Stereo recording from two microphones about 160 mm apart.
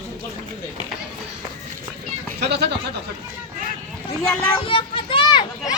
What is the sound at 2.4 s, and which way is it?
Speech, 90° right.